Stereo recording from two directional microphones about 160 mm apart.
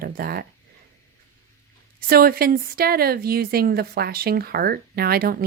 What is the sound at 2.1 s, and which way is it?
A woman's voice, 70° right (ahead or behind).